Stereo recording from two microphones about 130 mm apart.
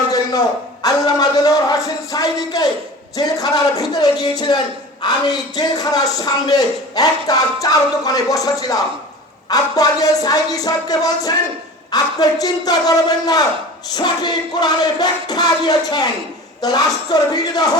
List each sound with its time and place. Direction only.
0.1 s a man's voice: 30° left (ahead or behind)
13.9 s music: 35° left (ahead or behind)
16.6 s a man's voice: 30° left (ahead or behind)